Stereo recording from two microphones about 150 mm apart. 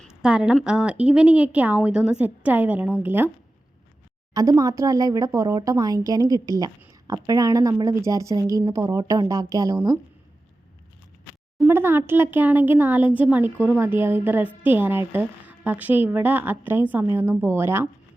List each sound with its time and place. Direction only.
0.0 s a woman's voice: 5° right (ahead or behind)
4.4 s speech: 25° right (ahead or behind)
11.6 s a woman's voice: 15° right (ahead or behind)